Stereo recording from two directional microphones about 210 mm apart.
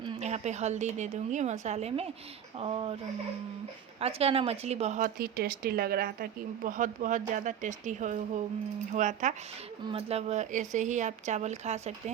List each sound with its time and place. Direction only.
0.0 s a woman's voice: 25° right (ahead or behind)
4.0 s a woman's voice: 30° right (ahead or behind)